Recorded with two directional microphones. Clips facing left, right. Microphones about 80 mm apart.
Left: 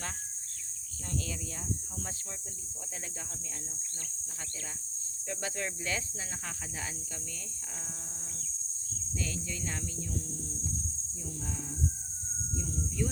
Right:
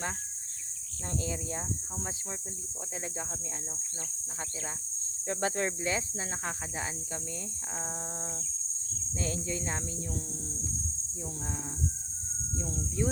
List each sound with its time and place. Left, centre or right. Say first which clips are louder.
1.2 s speech: right 5 dB; right
5.2 s speech: right 6 dB; right
9.2 s speech: right 5 dB; right
13.0 s speech: right 4 dB; right